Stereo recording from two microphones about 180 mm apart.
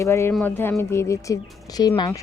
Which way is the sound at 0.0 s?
15° left (ahead or behind).